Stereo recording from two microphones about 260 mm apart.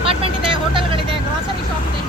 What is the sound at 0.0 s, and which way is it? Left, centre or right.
Vehicle, right.